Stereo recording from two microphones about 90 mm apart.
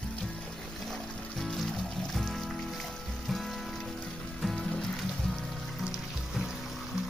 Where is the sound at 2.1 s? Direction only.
Centre (ahead or behind).